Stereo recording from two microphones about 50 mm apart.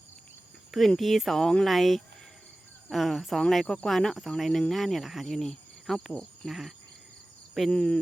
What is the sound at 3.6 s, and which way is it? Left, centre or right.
Speech, centre.